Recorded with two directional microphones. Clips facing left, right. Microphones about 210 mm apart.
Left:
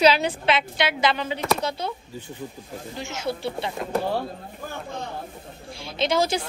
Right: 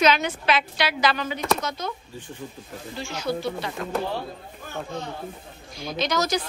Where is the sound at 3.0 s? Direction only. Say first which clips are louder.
Right 1 dB; 25° left (ahead or behind).